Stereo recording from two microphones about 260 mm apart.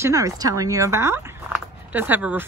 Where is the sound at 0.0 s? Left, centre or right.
Centre.